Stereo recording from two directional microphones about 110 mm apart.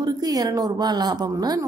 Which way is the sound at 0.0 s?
35° right (ahead or behind).